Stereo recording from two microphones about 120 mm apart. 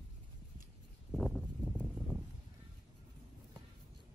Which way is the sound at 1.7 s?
5° left (ahead or behind).